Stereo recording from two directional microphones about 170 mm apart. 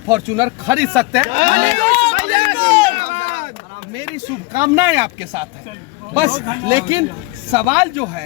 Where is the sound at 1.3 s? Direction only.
50° right (ahead or behind).